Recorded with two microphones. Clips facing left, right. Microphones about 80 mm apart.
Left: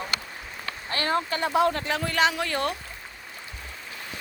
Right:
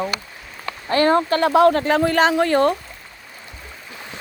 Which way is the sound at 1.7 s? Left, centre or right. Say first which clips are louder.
Right 10 dB; right.